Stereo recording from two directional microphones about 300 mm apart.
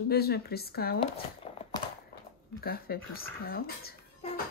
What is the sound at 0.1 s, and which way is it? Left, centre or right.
Speech, left.